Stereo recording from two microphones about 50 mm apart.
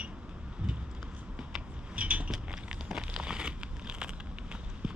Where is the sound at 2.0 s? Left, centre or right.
Right.